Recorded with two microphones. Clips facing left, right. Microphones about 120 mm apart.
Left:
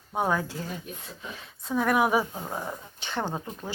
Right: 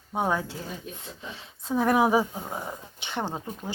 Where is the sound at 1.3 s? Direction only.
30° right (ahead or behind).